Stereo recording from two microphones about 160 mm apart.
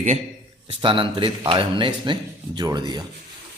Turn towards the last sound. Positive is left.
turn(degrees=-25)  # may be behind; listen again after turning